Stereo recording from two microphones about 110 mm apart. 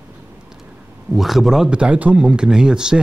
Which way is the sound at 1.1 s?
Centre (ahead or behind).